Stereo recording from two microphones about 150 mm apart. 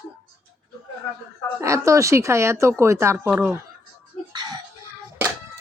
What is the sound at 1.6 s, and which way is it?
Speech, 20° right (ahead or behind).